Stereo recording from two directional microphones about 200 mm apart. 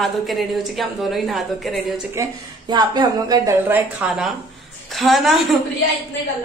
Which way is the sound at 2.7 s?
20° right (ahead or behind).